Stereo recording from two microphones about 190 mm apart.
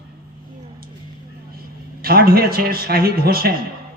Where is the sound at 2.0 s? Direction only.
50° right (ahead or behind).